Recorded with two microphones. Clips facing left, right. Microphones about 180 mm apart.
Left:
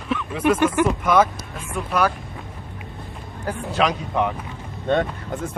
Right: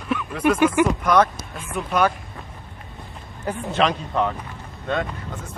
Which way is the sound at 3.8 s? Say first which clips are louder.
Even; 10° left (ahead or behind).